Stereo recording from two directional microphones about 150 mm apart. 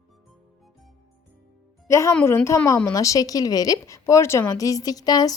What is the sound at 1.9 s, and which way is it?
A woman's voice, 20° left (ahead or behind).